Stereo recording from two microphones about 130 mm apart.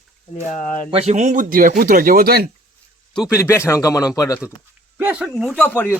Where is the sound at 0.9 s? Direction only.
60° right (ahead or behind); by 2.1 s 90° right.